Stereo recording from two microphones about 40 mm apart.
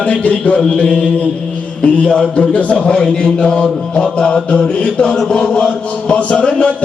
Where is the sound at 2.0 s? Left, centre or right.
Centre.